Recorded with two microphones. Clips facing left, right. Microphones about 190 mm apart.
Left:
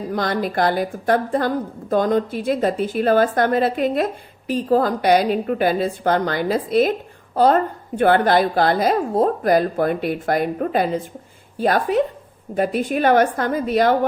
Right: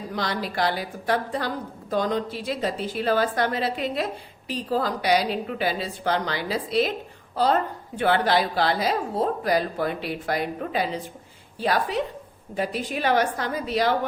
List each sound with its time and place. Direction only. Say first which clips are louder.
0.1 s a woman's voice: left 7 dB; 50° left (ahead or behind)